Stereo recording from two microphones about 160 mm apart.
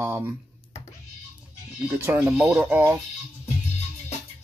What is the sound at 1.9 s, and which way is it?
Speech, 10° right (ahead or behind).